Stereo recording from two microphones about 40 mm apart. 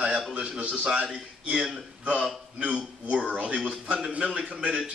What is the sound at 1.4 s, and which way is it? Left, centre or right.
A man's voice, right.